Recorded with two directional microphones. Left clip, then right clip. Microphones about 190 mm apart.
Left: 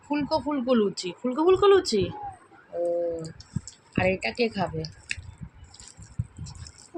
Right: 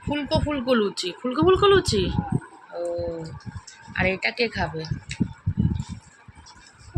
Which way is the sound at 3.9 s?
5° left (ahead or behind).